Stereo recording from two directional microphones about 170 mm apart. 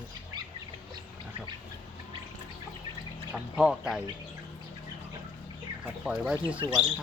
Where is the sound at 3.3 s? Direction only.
5° right (ahead or behind).